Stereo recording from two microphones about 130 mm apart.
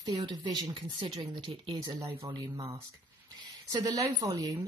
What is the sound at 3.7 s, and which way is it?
Speech, 30° right (ahead or behind).